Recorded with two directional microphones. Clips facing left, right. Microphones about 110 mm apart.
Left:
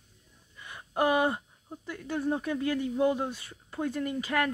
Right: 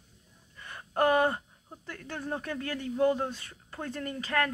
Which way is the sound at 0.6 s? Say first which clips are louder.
Right 1 dB; 10° left (ahead or behind).